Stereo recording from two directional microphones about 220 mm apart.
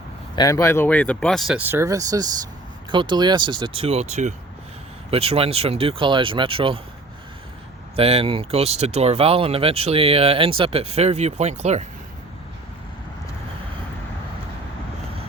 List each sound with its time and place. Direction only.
0.3 s speech: 15° left (ahead or behind); by 6.7 s 25° right (ahead or behind)
7.9 s speech: 25° right (ahead or behind)